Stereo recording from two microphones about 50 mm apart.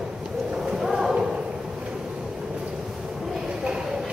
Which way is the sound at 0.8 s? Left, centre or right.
Centre.